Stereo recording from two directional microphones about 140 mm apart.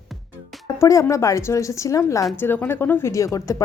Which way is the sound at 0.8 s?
20° left (ahead or behind).